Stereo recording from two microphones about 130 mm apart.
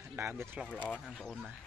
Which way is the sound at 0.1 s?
15° right (ahead or behind).